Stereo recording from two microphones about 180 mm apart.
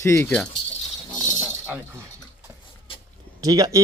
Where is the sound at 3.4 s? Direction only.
20° right (ahead or behind).